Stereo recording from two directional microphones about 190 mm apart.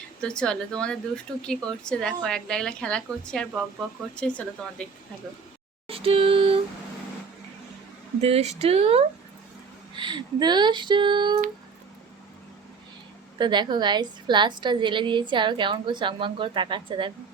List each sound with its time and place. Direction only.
0.2 s a woman's voice: 5° left (ahead or behind)
5.9 s music: 30° right (ahead or behind)
8.2 s a woman's voice: 35° right (ahead or behind)
13.4 s a woman's voice: 25° right (ahead or behind)